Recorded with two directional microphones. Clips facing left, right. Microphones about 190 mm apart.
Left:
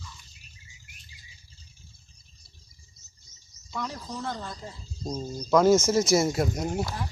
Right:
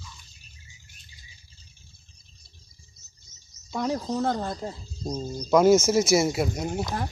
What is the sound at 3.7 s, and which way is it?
Speech, 45° right (ahead or behind).